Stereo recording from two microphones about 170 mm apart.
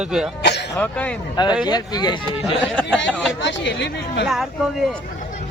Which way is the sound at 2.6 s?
5° left (ahead or behind).